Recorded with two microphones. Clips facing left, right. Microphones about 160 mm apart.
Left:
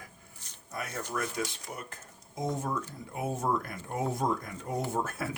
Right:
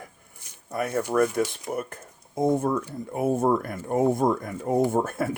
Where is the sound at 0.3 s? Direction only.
10° right (ahead or behind).